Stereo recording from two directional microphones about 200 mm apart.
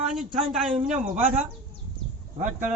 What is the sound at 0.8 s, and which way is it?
Speech, 40° right (ahead or behind).